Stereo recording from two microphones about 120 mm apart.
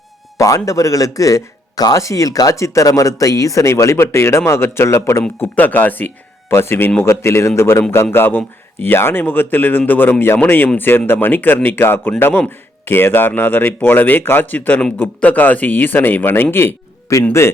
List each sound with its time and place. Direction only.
0.3 s speech: 25° left (ahead or behind)